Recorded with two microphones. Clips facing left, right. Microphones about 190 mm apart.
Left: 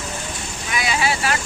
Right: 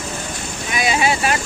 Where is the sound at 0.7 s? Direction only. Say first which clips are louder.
Right 3 dB; 20° right (ahead or behind).